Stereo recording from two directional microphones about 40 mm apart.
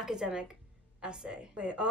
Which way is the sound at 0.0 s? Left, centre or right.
Centre.